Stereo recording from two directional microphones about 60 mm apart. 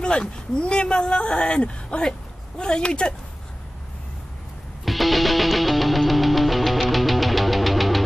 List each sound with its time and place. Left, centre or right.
0.0 s speech: centre
4.8 s music: centre